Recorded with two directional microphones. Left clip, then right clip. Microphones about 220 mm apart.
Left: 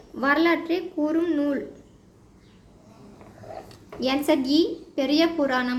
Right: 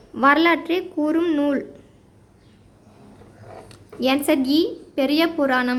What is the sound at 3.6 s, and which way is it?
A woman's voice, 20° right (ahead or behind).